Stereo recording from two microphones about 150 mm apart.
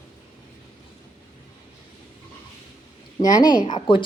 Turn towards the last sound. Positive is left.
turn(degrees=30)  # may be behind; listen again after turning